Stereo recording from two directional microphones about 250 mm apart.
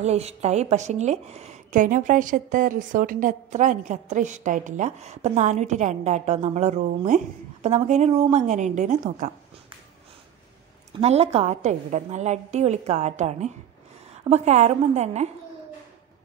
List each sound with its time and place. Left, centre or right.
0.0 s a woman's voice: right
11.0 s a woman's voice: right